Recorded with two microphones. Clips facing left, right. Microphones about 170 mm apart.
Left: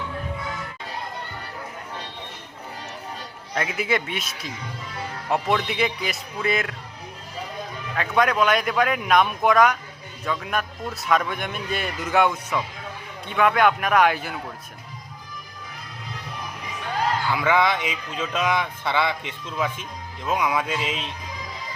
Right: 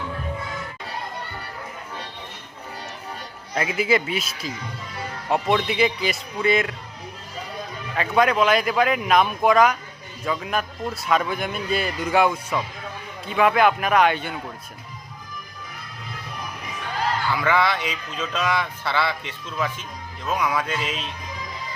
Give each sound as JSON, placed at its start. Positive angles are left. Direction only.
{"t": 3.5, "sound": "speech", "side_deg": 0}
{"t": 7.9, "sound": "speech", "side_deg": 0}
{"t": 17.3, "sound": "speech", "side_deg": 15}